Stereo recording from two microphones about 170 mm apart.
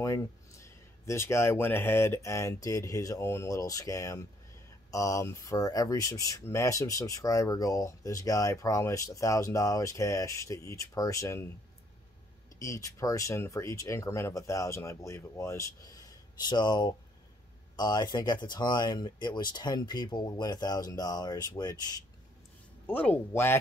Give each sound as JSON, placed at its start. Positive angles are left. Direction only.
{"t": 0.0, "sound": "speech", "side_deg": 20}
{"t": 12.5, "sound": "speech", "side_deg": 20}
{"t": 22.8, "sound": "speech", "side_deg": 10}